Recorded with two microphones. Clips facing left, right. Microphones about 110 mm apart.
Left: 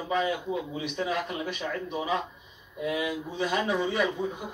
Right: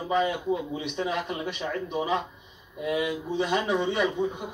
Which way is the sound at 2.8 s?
30° right (ahead or behind).